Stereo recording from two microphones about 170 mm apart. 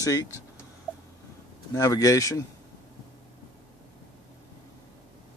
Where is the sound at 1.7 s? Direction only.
20° left (ahead or behind).